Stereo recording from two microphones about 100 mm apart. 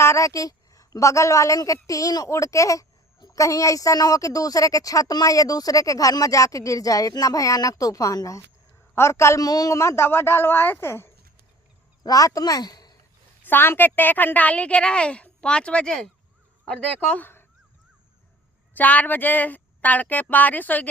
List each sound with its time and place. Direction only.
0.0 s a woman's voice: 30° left (ahead or behind)
12.0 s a woman's voice: 35° left (ahead or behind)
13.4 s a woman's voice: 20° left (ahead or behind)
18.7 s a woman's voice: 15° left (ahead or behind)